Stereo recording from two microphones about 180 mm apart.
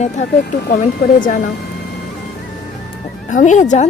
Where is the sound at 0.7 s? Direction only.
50° left (ahead or behind).